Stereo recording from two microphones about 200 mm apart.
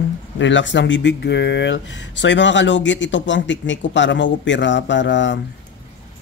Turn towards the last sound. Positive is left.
turn(degrees=65)  # may be behind; listen again after turning